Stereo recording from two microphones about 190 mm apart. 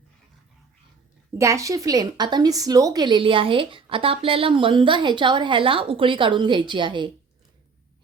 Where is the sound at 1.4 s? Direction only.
15° right (ahead or behind).